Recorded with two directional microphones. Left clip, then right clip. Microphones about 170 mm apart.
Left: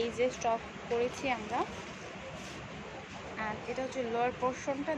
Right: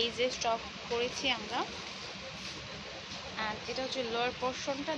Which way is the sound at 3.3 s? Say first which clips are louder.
Even; 15° left (ahead or behind).